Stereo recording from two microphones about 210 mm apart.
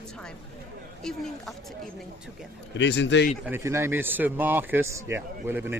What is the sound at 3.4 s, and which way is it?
A man's voice, 10° right (ahead or behind).